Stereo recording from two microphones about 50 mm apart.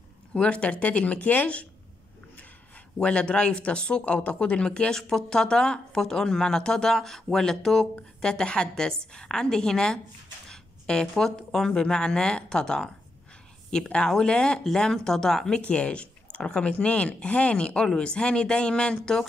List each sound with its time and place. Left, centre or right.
0.3 s speech: left
3.0 s speech: left
15.7 s speech: left